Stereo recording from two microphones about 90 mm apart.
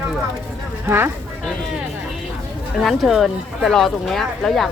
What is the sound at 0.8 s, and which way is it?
Speech, 25° right (ahead or behind).